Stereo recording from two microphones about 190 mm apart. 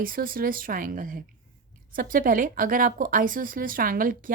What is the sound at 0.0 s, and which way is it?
A woman's voice, 50° right (ahead or behind).